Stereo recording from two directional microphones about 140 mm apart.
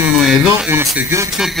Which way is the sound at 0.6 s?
15° right (ahead or behind).